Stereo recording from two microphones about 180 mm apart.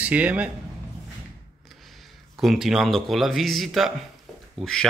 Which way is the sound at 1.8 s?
Centre (ahead or behind).